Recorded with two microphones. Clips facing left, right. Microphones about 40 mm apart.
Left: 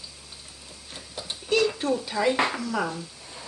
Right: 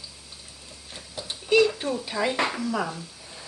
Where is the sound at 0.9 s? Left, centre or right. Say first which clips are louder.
Even; centre.